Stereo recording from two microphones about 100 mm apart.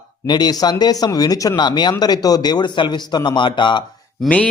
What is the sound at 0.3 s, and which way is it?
Speech, 45° left (ahead or behind).